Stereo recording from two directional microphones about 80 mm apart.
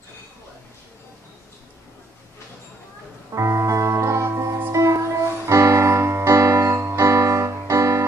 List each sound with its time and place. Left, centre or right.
3.3 s music: right